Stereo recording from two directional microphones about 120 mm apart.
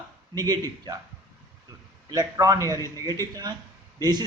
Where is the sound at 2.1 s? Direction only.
30° right (ahead or behind).